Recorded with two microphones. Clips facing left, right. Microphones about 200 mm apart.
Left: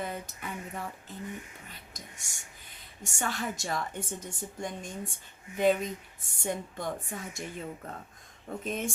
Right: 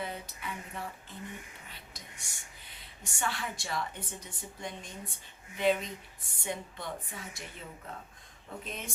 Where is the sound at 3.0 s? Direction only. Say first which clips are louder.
Left 3 dB; 45° left (ahead or behind).